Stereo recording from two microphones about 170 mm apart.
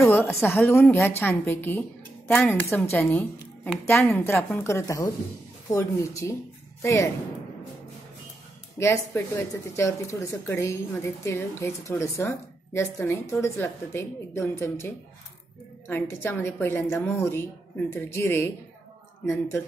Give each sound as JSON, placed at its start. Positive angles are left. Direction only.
{"t": 0.0, "sound": "a woman's voice", "side_deg": 15}
{"t": 8.7, "sound": "speech", "side_deg": 15}
{"t": 15.9, "sound": "speech", "side_deg": 15}